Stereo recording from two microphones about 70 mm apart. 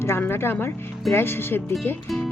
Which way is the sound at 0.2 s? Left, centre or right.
Left.